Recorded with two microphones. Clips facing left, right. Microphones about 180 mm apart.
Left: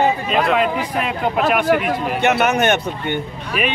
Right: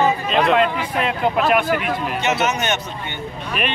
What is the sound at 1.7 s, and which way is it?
Speech, 55° left (ahead or behind).